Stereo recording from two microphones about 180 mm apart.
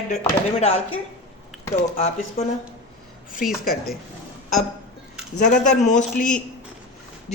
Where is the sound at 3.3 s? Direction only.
50° left (ahead or behind).